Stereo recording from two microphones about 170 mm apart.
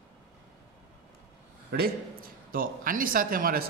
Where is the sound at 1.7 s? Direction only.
60° right (ahead or behind).